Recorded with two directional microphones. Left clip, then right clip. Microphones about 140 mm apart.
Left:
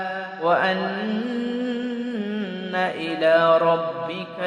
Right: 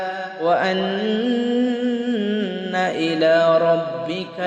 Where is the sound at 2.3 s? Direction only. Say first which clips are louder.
Right 4 dB; 30° right (ahead or behind).